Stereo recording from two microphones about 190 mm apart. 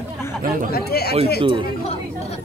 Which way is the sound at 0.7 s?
55° left (ahead or behind).